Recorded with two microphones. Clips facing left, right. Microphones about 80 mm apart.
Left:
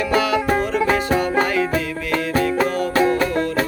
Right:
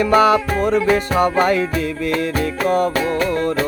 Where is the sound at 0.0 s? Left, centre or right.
Right.